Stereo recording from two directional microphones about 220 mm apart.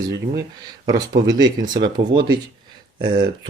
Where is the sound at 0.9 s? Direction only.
15° right (ahead or behind).